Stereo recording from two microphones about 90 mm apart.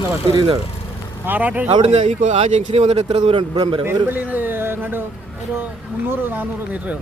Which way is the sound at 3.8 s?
20° right (ahead or behind).